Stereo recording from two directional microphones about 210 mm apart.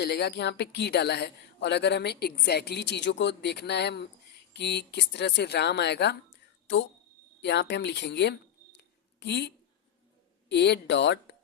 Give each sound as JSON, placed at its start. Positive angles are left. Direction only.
{"t": 0.0, "sound": "a woman's voice", "side_deg": 50}
{"t": 7.4, "sound": "speech", "side_deg": 55}
{"t": 10.5, "sound": "speech", "side_deg": 55}